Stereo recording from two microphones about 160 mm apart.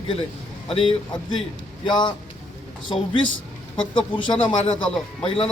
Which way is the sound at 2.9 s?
30° left (ahead or behind).